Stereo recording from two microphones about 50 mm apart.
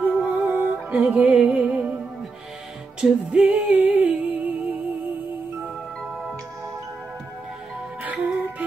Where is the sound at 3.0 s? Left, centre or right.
Right.